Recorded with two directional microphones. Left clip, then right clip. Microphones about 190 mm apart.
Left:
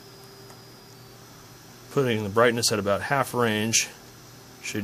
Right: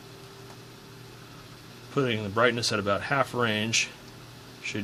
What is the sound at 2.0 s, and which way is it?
Speech, 45° left (ahead or behind).